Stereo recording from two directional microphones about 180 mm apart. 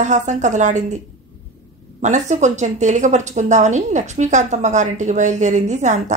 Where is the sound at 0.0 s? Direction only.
40° right (ahead or behind).